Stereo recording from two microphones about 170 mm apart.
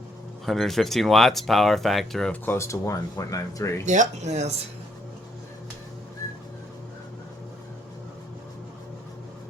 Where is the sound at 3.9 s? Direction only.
45° right (ahead or behind).